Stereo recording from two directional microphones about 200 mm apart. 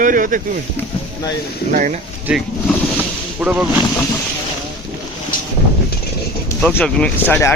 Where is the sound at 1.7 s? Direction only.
40° right (ahead or behind).